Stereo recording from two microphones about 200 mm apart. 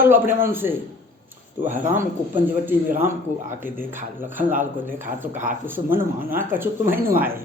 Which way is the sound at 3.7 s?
45° right (ahead or behind).